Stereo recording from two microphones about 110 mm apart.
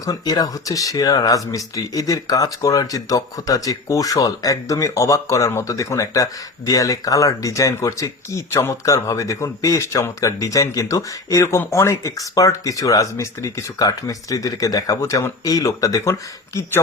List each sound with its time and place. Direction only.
0.0 s speech: 35° left (ahead or behind)